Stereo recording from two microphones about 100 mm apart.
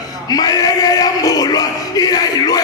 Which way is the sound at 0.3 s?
40° left (ahead or behind).